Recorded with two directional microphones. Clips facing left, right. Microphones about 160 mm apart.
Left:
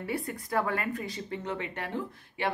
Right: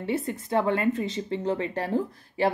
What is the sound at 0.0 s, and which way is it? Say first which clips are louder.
Speech: right 5 dB; 25° right (ahead or behind).